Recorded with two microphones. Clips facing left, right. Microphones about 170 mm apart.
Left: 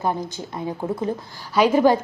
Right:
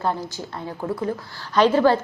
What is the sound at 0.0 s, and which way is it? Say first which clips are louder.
A woman's voice: left 1 dB; 15° left (ahead or behind).